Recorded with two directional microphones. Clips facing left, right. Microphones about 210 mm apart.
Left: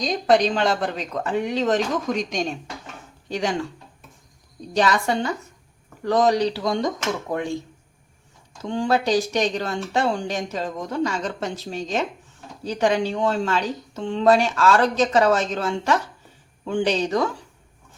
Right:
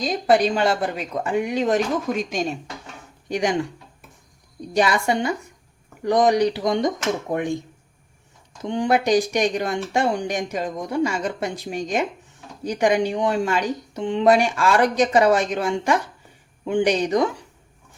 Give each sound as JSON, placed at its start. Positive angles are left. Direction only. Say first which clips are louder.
{"t": 0.0, "sound": "speech", "louder": "even", "side_deg": -5}
{"t": 3.2, "sound": "speech", "louder": "right 3 dB", "side_deg": -15}
{"t": 4.7, "sound": "speech", "louder": "right 1 dB", "side_deg": -10}
{"t": 8.6, "sound": "speech", "louder": "right 1 dB", "side_deg": -15}